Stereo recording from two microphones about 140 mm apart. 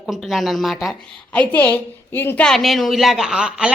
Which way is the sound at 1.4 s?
10° left (ahead or behind).